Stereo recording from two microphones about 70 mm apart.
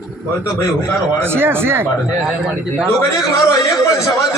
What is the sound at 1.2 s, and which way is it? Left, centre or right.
Speech, right.